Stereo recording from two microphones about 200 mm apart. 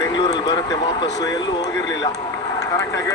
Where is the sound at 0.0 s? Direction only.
20° left (ahead or behind).